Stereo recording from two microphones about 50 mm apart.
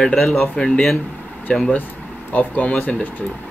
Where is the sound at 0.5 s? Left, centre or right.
Centre.